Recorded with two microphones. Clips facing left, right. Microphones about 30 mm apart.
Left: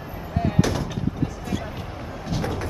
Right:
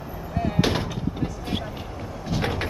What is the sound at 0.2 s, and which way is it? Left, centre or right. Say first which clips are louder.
Vehicle: left 1 dB; centre.